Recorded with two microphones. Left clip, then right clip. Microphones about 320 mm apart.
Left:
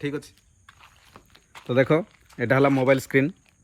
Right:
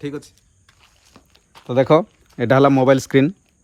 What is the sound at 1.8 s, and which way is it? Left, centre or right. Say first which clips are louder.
Speech: right 7 dB; right.